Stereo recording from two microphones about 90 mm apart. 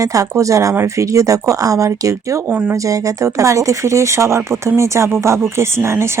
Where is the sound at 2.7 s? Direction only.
35° right (ahead or behind).